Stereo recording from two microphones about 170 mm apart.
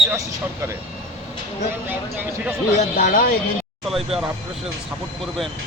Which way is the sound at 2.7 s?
50° left (ahead or behind).